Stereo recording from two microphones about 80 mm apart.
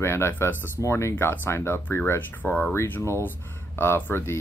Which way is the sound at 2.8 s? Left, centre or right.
Left.